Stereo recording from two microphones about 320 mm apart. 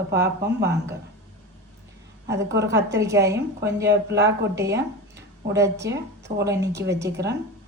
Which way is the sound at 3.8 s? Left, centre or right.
Right.